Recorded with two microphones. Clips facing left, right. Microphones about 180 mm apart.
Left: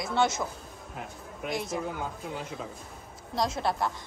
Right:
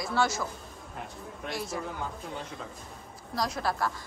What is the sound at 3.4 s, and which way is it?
Speech, 25° left (ahead or behind).